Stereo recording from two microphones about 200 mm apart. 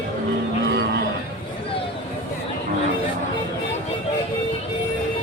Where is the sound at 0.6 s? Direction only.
60° right (ahead or behind).